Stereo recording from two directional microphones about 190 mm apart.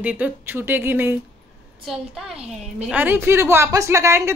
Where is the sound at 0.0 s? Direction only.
10° right (ahead or behind).